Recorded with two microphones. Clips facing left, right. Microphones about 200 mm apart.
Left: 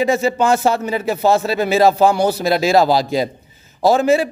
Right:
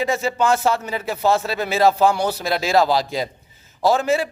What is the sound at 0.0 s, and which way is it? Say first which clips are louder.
Speech: left 4 dB; 20° left (ahead or behind).